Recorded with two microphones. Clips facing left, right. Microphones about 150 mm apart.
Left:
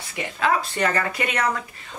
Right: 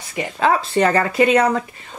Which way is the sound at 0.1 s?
30° right (ahead or behind).